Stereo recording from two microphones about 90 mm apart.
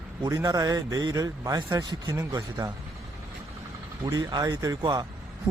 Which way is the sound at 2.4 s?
40° right (ahead or behind).